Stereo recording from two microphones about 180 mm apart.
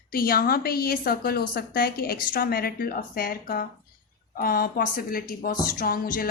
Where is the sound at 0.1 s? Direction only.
55° left (ahead or behind).